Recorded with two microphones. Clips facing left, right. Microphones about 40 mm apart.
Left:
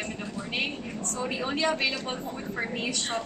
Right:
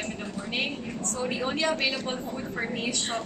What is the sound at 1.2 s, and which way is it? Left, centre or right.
Speech, centre.